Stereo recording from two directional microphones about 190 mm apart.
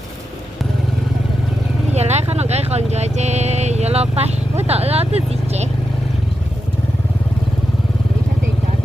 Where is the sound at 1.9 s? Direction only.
35° right (ahead or behind).